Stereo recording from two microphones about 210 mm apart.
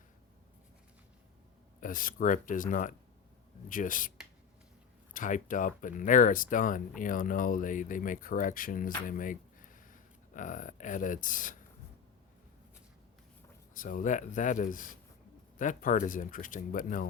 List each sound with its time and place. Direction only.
1.8 s speech: 40° left (ahead or behind)
5.1 s speech: 40° left (ahead or behind)
13.7 s speech: 40° left (ahead or behind)